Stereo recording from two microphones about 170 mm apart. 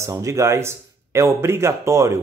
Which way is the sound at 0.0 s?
15° right (ahead or behind).